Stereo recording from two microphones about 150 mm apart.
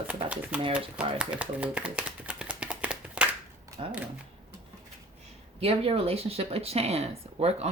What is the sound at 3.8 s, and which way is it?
Speech, 40° right (ahead or behind).